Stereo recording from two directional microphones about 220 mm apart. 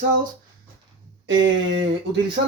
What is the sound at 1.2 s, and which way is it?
Speech, 55° right (ahead or behind).